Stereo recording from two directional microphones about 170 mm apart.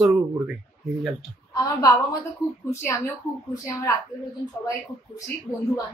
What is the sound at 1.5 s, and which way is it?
Speech, 20° left (ahead or behind).